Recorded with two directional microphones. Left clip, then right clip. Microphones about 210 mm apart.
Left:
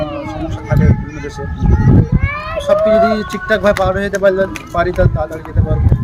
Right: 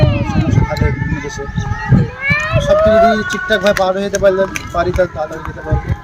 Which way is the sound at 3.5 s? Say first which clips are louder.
Left 1 dB; 20° left (ahead or behind).